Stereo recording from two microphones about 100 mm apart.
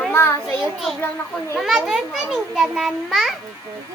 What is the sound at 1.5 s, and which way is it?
A child's voice, 5° right (ahead or behind).